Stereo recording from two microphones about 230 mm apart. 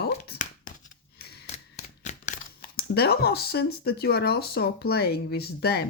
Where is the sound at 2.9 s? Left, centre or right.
Left.